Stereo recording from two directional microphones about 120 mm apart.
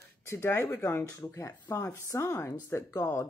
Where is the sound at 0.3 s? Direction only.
20° left (ahead or behind).